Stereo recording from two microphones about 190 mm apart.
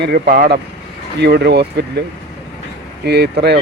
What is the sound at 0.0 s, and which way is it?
Speech, 50° right (ahead or behind).